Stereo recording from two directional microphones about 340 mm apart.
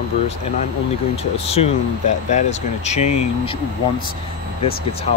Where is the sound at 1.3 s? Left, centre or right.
Centre.